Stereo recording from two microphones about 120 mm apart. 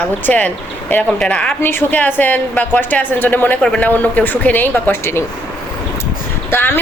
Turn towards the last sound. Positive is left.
turn(degrees=20)  # may be behind; listen again after turning